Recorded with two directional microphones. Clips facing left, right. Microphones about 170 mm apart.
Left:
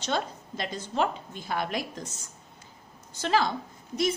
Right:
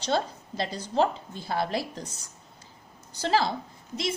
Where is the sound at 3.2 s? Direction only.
35° right (ahead or behind).